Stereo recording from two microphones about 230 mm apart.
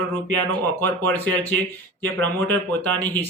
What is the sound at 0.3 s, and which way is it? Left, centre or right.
Speech, centre.